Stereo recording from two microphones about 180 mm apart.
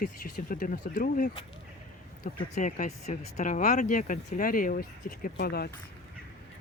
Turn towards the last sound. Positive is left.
turn(degrees=60)  # may be behind; listen again after turning